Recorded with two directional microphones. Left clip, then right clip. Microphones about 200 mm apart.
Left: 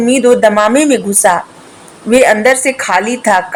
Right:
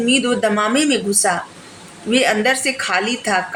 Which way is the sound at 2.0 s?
10° left (ahead or behind).